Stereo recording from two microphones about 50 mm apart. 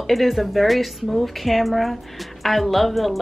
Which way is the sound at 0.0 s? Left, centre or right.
Centre.